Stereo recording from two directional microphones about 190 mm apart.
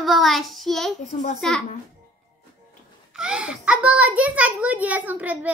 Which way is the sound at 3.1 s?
5° right (ahead or behind).